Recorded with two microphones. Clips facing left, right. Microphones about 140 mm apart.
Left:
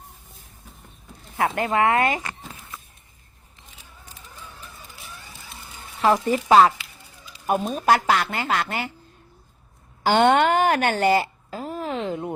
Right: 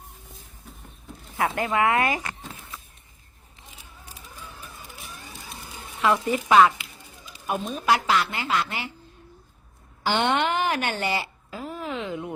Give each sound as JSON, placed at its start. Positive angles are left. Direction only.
{"t": 1.4, "sound": "speech", "side_deg": 25}
{"t": 4.0, "sound": "a sound", "side_deg": -10}
{"t": 6.0, "sound": "speech", "side_deg": 35}
{"t": 7.4, "sound": "speech", "side_deg": 45}
{"t": 10.0, "sound": "speech", "side_deg": 45}